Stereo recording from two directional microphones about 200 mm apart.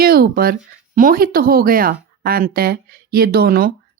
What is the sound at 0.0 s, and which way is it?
A woman's voice, 50° right (ahead or behind).